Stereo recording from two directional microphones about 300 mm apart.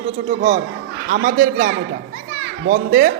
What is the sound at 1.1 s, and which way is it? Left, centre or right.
Speech, right.